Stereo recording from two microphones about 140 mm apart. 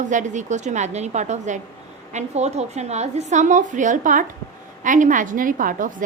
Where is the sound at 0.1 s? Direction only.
60° right (ahead or behind).